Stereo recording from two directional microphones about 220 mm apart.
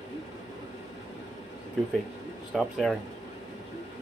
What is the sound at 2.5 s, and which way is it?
Speech, centre (ahead or behind).